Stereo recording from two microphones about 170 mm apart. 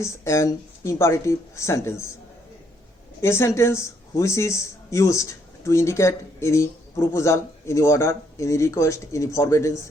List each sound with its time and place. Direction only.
0.0 s speech: 15° left (ahead or behind)
3.2 s speech: 15° left (ahead or behind)